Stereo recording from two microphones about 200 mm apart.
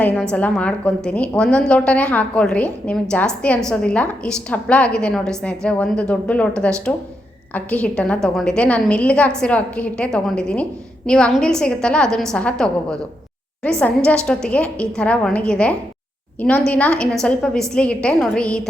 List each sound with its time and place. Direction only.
0.0 s a woman's voice: 5° left (ahead or behind)